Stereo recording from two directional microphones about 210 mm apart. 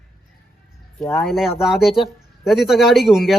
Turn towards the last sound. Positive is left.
turn(degrees=0)  # may be behind; listen again after turning